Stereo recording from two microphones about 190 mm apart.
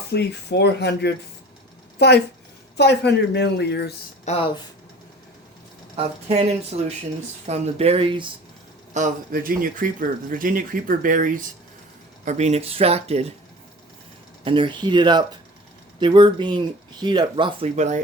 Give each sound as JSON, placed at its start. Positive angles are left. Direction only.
{"t": 0.1, "sound": "speech", "side_deg": 60}
{"t": 4.3, "sound": "speech", "side_deg": 30}
{"t": 6.0, "sound": "speech", "side_deg": -30}
{"t": 8.9, "sound": "speech", "side_deg": -40}
{"t": 14.4, "sound": "speech", "side_deg": -25}